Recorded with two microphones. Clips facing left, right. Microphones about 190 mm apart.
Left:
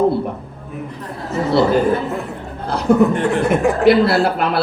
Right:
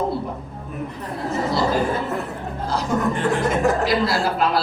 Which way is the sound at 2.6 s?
60° left (ahead or behind).